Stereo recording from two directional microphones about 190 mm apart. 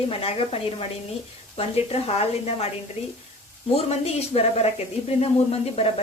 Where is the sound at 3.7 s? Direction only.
35° left (ahead or behind).